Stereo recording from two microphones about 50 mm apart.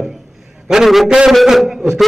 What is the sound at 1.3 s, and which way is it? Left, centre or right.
Speech, centre.